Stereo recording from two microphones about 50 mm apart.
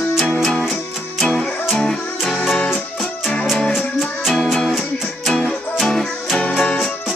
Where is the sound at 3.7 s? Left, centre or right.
Centre.